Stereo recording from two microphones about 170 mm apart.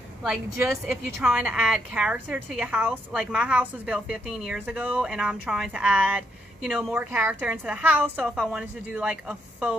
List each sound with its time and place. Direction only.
0.5 s speech: 15° right (ahead or behind)
1.2 s a woman's voice: 5° right (ahead or behind)